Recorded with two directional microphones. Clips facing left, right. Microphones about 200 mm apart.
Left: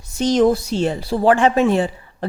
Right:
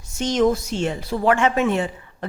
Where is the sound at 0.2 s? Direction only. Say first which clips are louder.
Left 4 dB; 35° left (ahead or behind).